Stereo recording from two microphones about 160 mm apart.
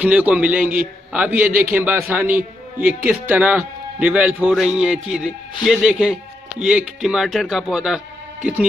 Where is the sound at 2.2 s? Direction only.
60° right (ahead or behind).